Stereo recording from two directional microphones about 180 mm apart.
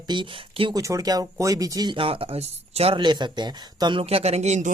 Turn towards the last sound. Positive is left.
turn(degrees=-40)  # may be behind; listen again after turning